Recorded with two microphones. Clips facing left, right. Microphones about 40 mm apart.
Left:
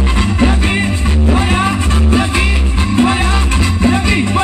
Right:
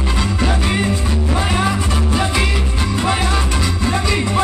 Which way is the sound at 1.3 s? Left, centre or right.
Left.